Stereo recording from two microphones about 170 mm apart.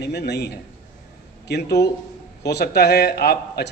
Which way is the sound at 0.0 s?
75° left (ahead or behind).